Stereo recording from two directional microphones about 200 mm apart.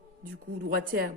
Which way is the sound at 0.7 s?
50° right (ahead or behind).